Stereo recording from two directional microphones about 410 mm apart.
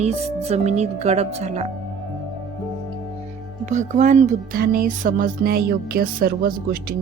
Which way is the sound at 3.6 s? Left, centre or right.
Centre.